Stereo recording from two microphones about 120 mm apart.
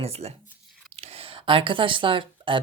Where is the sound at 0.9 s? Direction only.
60° right (ahead or behind).